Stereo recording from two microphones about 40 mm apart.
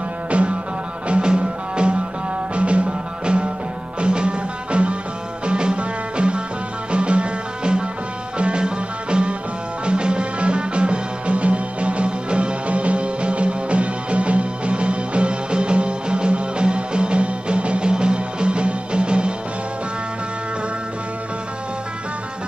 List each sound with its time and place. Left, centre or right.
0.3 s music: right